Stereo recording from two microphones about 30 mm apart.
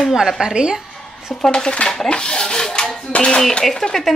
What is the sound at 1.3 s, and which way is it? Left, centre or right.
Speech, left.